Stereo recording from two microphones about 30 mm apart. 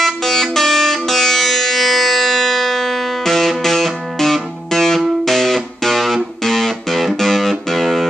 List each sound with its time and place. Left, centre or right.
0.0 s music: centre